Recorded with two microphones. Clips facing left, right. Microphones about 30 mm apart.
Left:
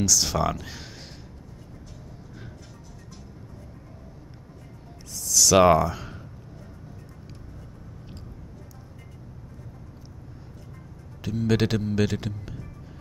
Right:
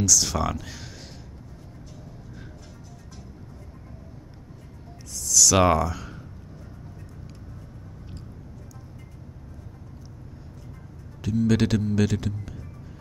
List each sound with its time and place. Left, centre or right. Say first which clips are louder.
0.0 s a man's voice: even; centre
5.1 s a sound: left 1 dB; centre
11.1 s a man's voice: right 2 dB; centre